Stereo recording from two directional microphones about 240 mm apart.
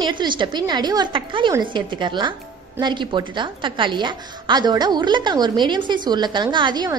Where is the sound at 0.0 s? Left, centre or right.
Centre.